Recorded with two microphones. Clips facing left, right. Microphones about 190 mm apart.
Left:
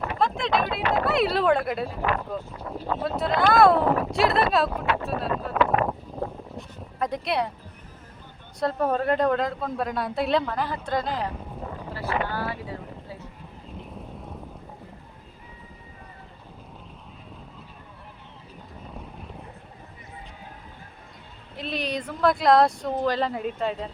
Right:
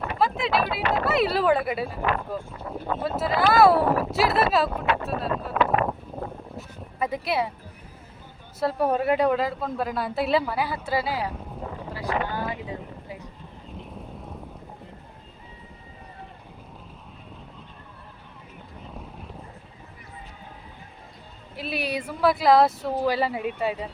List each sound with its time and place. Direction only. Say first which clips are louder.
0.2 s speech: right 1 dB; 5° right (ahead or behind)
2.4 s speech: even; 55° right (ahead or behind)
3.0 s speech: even; 5° right (ahead or behind)
6.6 s speech: even; 5° right (ahead or behind)
8.6 s speech: right 1 dB; 10° right (ahead or behind)
11.9 s a sound: even; 15° right (ahead or behind)
13.7 s vehicle: even; centre (ahead or behind)
18.9 s vehicle: even; centre (ahead or behind)
21.5 s speech: even; 5° right (ahead or behind)